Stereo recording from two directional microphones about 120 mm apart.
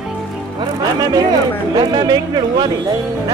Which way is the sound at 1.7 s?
35° right (ahead or behind).